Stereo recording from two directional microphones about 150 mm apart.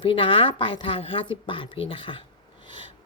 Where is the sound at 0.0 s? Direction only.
35° left (ahead or behind).